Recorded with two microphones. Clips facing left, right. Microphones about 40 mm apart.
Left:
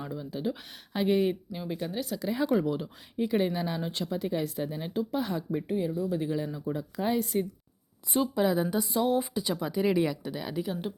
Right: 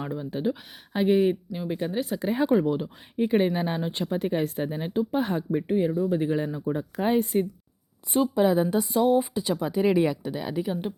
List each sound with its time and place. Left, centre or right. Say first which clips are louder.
0.0 s speech: right 5 dB; right
0.9 s speech: right 4 dB; centre; by 7.4 s right
8.1 s speech: right 4 dB; centre